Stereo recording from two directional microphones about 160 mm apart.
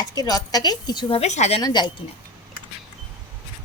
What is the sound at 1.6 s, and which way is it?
Speech, 25° left (ahead or behind).